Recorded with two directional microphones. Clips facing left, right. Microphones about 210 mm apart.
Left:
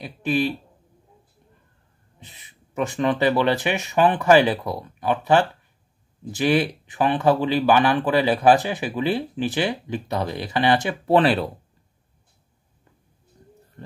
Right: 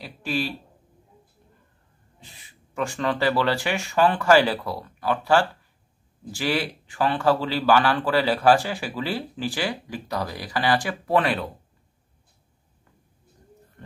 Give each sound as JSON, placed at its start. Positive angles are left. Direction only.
{"t": 0.0, "sound": "speech", "side_deg": 20}
{"t": 2.1, "sound": "speech", "side_deg": 20}
{"t": 13.8, "sound": "a sound", "side_deg": 30}